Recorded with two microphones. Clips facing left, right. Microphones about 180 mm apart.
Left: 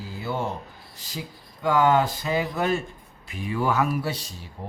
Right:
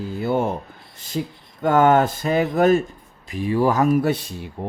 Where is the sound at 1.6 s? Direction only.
50° right (ahead or behind).